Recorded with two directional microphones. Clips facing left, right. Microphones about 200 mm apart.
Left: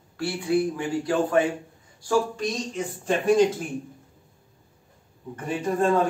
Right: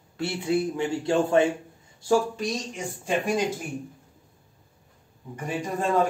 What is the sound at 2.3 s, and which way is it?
Speech, 10° right (ahead or behind).